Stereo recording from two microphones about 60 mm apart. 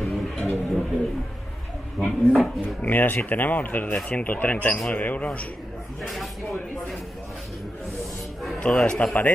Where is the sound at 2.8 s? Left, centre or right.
Left.